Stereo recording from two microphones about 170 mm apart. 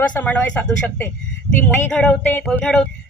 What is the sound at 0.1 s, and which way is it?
A man's voice, 10° left (ahead or behind).